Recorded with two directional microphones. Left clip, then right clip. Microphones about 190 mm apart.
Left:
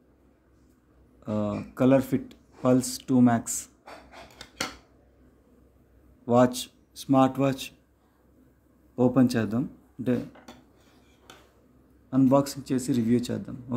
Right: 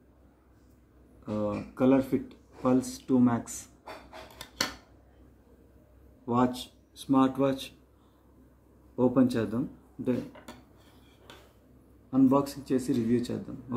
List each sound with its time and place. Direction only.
1.4 s speech: 70° left (ahead or behind)
6.2 s speech: 70° left (ahead or behind)
8.9 s speech: 60° left (ahead or behind)
12.1 s speech: 65° left (ahead or behind)